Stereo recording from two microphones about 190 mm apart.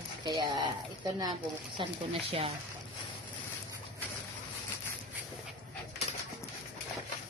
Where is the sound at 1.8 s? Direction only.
25° right (ahead or behind).